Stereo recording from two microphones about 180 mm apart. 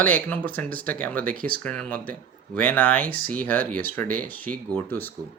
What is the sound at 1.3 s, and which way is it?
Speech, 55° right (ahead or behind).